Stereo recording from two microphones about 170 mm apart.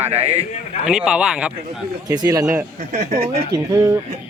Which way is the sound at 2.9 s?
40° right (ahead or behind).